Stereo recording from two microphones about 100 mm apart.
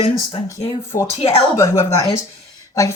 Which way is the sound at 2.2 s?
35° left (ahead or behind).